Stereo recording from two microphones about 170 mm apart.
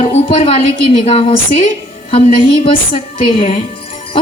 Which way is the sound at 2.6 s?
35° left (ahead or behind).